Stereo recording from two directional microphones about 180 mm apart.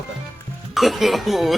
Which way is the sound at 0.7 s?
Centre (ahead or behind).